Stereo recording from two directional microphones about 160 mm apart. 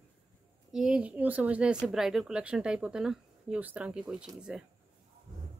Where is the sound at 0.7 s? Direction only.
5° right (ahead or behind).